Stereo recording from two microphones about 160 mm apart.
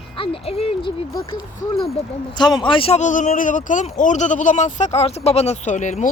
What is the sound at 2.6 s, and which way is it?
Speech, 35° left (ahead or behind).